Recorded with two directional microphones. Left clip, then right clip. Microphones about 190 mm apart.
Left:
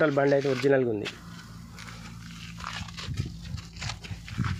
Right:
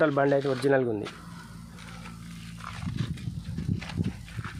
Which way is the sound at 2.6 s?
65° left (ahead or behind).